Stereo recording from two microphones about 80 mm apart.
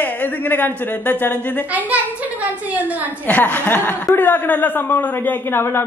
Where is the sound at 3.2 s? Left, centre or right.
Left.